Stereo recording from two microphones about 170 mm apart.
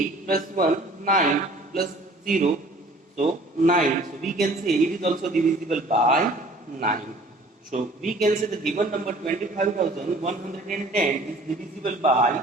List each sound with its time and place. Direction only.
0.3 s a man's voice: 55° right (ahead or behind)